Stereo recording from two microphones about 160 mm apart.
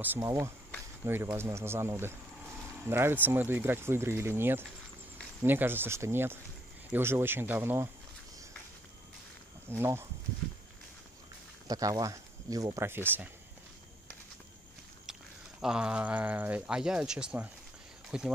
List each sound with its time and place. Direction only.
0.0 s speech: 15° right (ahead or behind)
9.7 s speech: 15° right (ahead or behind)
11.6 s speech: 25° right (ahead or behind)
15.6 s speech: 5° right (ahead or behind)